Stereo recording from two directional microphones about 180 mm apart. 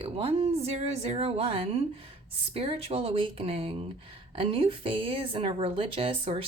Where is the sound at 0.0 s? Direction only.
35° right (ahead or behind).